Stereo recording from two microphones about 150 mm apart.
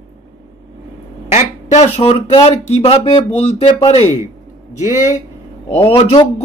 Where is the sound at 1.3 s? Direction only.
50° left (ahead or behind).